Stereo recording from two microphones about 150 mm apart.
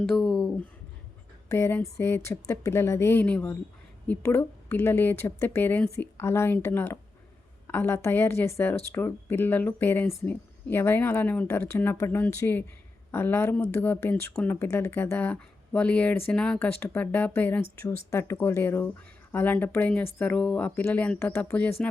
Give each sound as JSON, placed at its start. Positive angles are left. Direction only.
{"t": 0.0, "sound": "speech", "side_deg": 5}
{"t": 1.5, "sound": "speech", "side_deg": 15}